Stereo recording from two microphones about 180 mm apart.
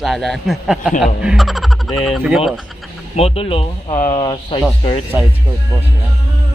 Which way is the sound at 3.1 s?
35° left (ahead or behind).